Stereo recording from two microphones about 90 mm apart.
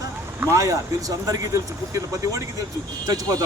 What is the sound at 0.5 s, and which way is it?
Speech, 40° right (ahead or behind).